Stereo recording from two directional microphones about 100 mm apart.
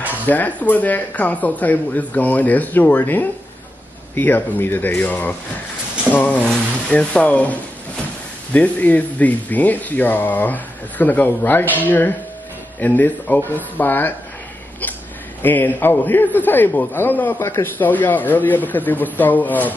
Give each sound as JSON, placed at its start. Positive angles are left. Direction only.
{"t": 0.3, "sound": "a man's voice", "side_deg": 15}
{"t": 15.4, "sound": "a man's voice", "side_deg": 20}